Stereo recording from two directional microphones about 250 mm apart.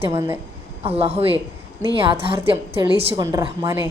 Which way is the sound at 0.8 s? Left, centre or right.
Right.